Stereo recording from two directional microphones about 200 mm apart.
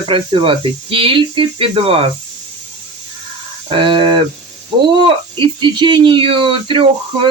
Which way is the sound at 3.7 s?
25° right (ahead or behind).